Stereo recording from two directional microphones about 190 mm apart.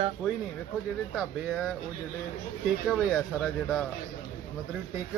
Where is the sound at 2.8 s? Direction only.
Centre (ahead or behind).